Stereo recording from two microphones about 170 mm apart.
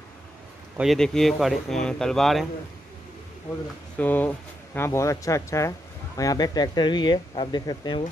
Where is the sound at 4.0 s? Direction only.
10° left (ahead or behind); by 8.0 s 25° left (ahead or behind).